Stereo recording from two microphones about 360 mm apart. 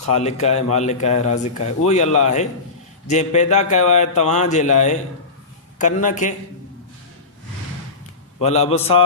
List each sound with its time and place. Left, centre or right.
0.1 s speech: centre
8.4 s a man's voice: centre